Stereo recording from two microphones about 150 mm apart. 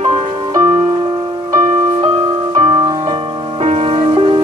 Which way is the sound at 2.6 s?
35° right (ahead or behind).